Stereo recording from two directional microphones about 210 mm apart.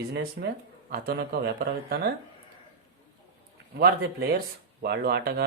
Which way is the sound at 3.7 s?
50° right (ahead or behind).